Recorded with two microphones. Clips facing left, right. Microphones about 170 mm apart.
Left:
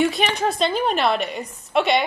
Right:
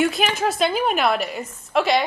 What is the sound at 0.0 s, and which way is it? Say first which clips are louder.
A woman's voice: even; 5° right (ahead or behind).